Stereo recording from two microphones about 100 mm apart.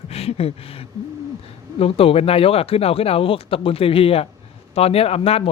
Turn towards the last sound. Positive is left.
turn(degrees=80)